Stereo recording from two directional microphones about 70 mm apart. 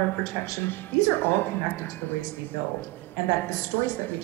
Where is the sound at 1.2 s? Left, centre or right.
Left.